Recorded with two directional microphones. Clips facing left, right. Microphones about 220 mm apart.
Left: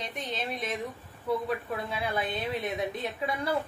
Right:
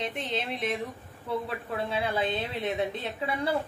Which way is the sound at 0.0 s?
30° right (ahead or behind).